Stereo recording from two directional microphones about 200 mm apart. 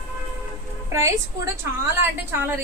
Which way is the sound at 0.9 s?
15° right (ahead or behind).